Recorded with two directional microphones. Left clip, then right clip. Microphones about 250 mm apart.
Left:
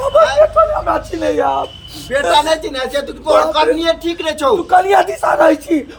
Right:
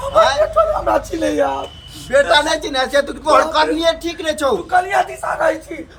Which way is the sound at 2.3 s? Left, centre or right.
Centre.